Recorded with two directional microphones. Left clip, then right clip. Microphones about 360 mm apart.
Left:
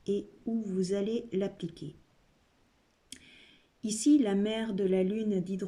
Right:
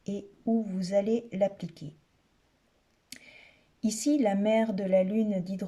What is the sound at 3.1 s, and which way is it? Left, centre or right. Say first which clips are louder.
Clicking: right 3 dB; centre.